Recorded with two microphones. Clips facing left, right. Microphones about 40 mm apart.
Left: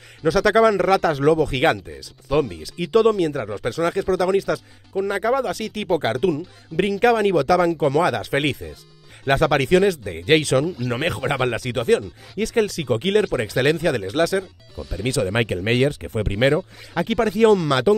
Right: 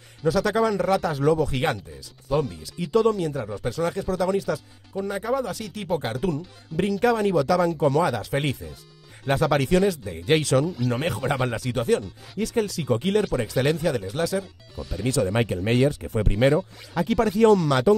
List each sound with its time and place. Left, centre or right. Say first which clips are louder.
0.3 s speech: left 6 dB; left
14.8 s speech: left 2 dB; centre
15.3 s speech: left 2 dB; left
16.2 s speech: left 2 dB; left